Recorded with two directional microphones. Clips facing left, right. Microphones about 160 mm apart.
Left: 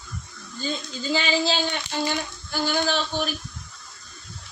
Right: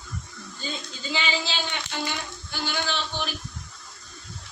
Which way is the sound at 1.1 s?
40° left (ahead or behind).